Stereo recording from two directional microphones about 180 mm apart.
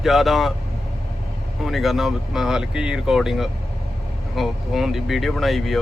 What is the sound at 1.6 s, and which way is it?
Speech, centre (ahead or behind).